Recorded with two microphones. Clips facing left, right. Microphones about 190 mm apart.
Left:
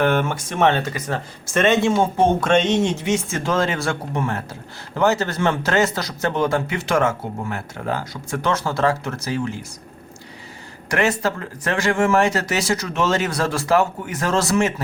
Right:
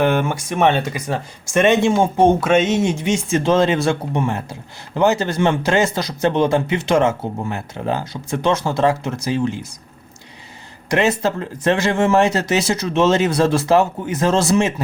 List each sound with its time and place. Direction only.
0.0 s speech: 15° right (ahead or behind)
10.9 s speech: 20° right (ahead or behind)